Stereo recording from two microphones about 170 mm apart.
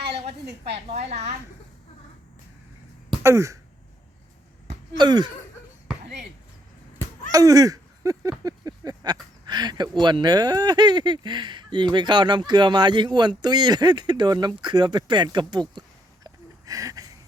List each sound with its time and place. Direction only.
0.3 s a woman's voice: 35° right (ahead or behind)
3.2 s throat clearing: 15° right (ahead or behind)
4.9 s speech: 25° right (ahead or behind)
7.3 s a sound: 20° right (ahead or behind)
9.5 s speech: 25° right (ahead or behind)
16.2 s a sound: 20° right (ahead or behind)